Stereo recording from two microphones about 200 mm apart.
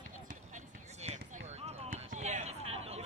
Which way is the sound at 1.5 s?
35° right (ahead or behind).